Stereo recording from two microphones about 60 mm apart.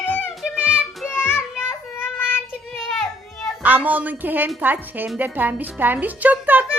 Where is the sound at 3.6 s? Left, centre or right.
Right.